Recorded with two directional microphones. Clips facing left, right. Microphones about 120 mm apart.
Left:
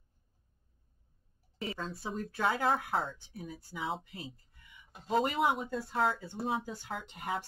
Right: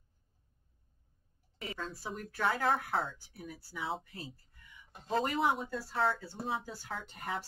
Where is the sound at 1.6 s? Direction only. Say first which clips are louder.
Left 3 dB; 30° left (ahead or behind).